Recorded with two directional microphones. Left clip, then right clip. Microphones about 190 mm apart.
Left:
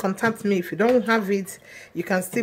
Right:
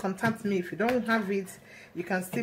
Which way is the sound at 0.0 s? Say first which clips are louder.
Left 7 dB; 40° left (ahead or behind).